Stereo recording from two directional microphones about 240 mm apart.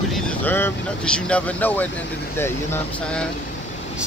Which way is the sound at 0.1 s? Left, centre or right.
Centre.